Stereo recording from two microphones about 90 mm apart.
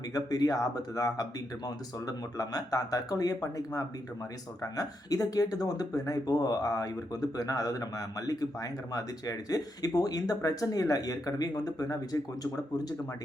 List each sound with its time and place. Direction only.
0.1 s speech: 45° left (ahead or behind)